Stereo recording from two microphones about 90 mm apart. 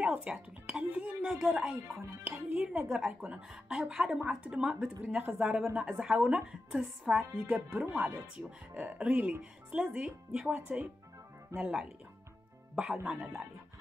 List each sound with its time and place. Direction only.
0.0 s speech: 15° right (ahead or behind)
11.5 s speech: 35° right (ahead or behind)
13.0 s speech: 5° right (ahead or behind)